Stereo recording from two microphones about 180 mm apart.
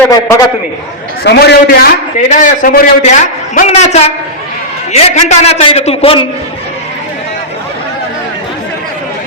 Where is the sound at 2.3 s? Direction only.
45° left (ahead or behind).